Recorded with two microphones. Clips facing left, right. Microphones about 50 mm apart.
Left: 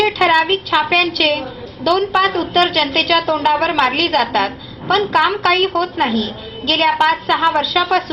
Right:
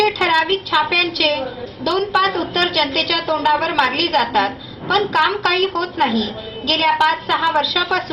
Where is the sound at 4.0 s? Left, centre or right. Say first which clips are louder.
Left 1 dB; left.